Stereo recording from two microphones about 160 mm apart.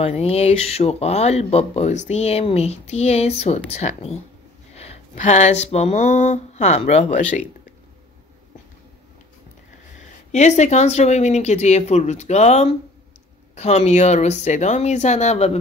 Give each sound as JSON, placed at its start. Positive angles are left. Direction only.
{"t": 0.0, "sound": "speech", "side_deg": 40}
{"t": 10.3, "sound": "speech", "side_deg": 45}